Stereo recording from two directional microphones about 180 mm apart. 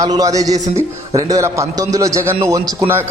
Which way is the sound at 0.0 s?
20° right (ahead or behind).